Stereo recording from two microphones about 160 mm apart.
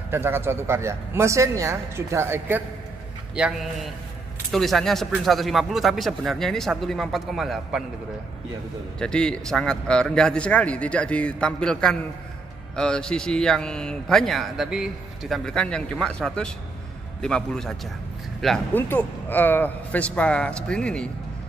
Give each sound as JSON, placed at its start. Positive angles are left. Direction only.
{"t": 0.1, "sound": "speech", "side_deg": -15}
{"t": 3.3, "sound": "speech", "side_deg": -5}
{"t": 9.0, "sound": "a man's voice", "side_deg": 5}